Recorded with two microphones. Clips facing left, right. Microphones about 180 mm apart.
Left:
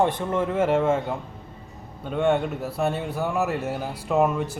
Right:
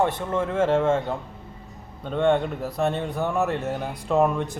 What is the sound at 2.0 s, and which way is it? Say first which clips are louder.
Speech: right 1 dB; 5° left (ahead or behind).